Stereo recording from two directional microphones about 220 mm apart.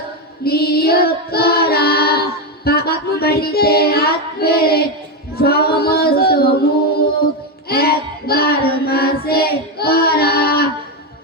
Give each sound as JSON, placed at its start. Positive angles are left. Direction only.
{"t": 0.4, "sound": "child singing", "side_deg": 45}
{"t": 7.7, "sound": "child singing", "side_deg": 45}